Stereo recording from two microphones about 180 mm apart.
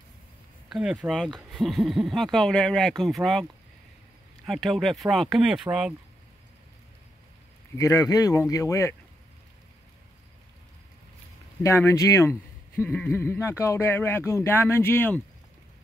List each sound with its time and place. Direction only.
0.7 s speech: 5° right (ahead or behind)
4.5 s speech: centre (ahead or behind)
7.7 s speech: 20° left (ahead or behind)
11.6 s speech: 15° left (ahead or behind)